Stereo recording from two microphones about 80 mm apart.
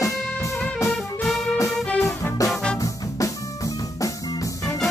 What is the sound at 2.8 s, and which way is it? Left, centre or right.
Music, left.